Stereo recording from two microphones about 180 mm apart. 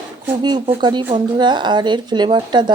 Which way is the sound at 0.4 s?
25° right (ahead or behind).